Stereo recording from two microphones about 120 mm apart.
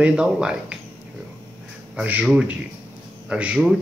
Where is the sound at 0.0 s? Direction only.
5° right (ahead or behind).